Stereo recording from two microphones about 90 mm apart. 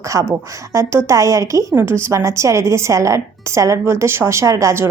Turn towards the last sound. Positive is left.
turn(degrees=-35)  # may be behind; listen again after turning